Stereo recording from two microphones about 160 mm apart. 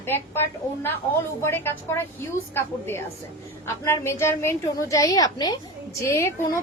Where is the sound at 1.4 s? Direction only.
15° left (ahead or behind).